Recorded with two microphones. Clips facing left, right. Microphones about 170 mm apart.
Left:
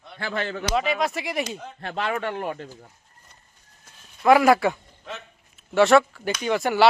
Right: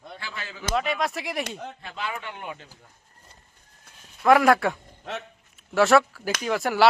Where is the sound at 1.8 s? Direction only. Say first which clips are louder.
Left 9 dB; 70° left (ahead or behind).